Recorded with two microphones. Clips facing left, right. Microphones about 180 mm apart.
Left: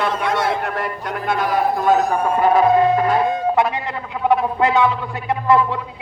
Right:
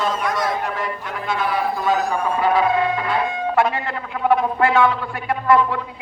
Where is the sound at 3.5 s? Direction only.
20° left (ahead or behind).